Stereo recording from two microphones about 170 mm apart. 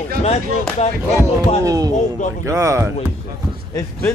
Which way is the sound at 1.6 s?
20° right (ahead or behind).